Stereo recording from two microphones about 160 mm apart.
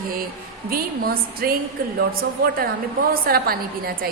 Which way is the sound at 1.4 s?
65° right (ahead or behind).